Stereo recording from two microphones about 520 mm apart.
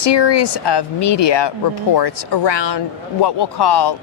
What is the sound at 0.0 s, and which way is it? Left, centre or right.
Speech, left.